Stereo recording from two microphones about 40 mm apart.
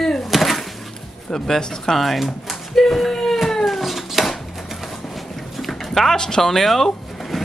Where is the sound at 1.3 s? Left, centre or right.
Centre.